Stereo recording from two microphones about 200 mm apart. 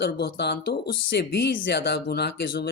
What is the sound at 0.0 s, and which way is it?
Speech, 55° left (ahead or behind).